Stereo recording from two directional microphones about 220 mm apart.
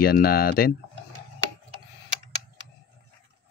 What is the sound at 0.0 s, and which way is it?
Speech, 45° left (ahead or behind).